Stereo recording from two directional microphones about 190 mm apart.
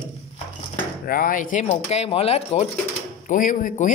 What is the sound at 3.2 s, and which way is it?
Speech, 45° left (ahead or behind).